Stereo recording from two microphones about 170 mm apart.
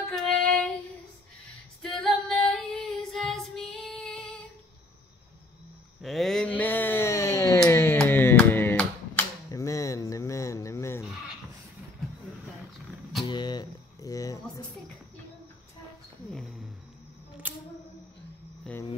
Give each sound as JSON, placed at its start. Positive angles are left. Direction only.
{"t": 0.1, "sound": "child singing", "side_deg": 5}
{"t": 1.8, "sound": "female singing", "side_deg": 5}
{"t": 6.0, "sound": "a sound", "side_deg": 0}
{"t": 13.2, "sound": "music", "side_deg": 25}
{"t": 16.3, "sound": "a sound", "side_deg": 0}
{"t": 17.4, "sound": "camera", "side_deg": -10}